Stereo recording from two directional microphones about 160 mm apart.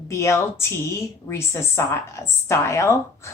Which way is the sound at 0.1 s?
20° left (ahead or behind).